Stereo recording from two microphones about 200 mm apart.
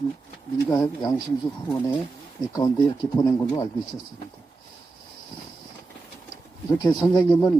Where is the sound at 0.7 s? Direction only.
20° left (ahead or behind).